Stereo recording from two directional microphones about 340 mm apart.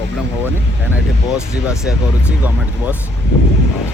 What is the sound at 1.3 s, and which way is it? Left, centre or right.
Speech, centre.